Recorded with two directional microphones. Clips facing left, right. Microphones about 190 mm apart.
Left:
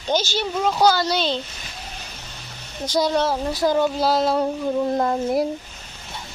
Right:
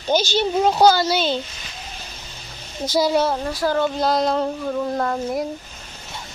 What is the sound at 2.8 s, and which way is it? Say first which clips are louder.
Speech: right 2 dB; 5° right (ahead or behind).